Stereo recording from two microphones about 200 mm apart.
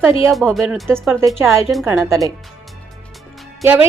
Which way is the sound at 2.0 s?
15° right (ahead or behind).